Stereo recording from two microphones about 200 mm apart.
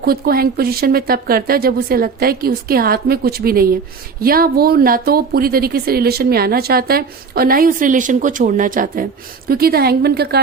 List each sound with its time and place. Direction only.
0.0 s a woman's voice: 50° right (ahead or behind)